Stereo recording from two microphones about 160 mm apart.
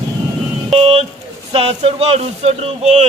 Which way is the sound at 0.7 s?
35° right (ahead or behind).